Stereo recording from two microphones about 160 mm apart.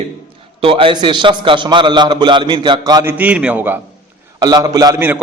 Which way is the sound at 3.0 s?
10° right (ahead or behind).